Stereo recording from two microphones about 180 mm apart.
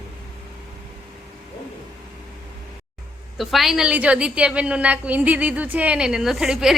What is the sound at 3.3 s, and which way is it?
A woman's voice, centre (ahead or behind).